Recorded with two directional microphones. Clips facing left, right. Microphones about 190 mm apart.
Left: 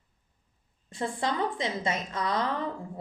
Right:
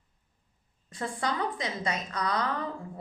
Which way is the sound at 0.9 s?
25° left (ahead or behind).